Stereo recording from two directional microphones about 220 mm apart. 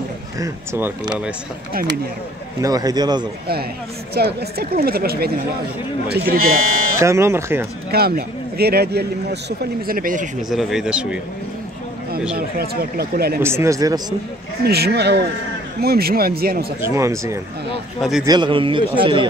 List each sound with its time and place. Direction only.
0.4 s speech: 10° right (ahead or behind)
2.6 s speech: 15° right (ahead or behind)
4.1 s speech: 45° right (ahead or behind)
7.0 s speech: 10° right (ahead or behind)
7.9 s speech: 45° right (ahead or behind)
10.5 s speech: centre (ahead or behind)
12.4 s speech: 45° right (ahead or behind)
13.4 s speech: 10° right (ahead or behind)
14.6 s speech: 45° right (ahead or behind)
16.8 s speech: 15° right (ahead or behind)